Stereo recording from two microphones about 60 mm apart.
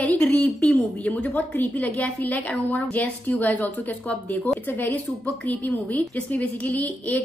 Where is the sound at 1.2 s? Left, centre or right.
Centre.